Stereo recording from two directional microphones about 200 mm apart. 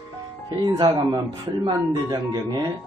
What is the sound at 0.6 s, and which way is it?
Speech, 20° right (ahead or behind).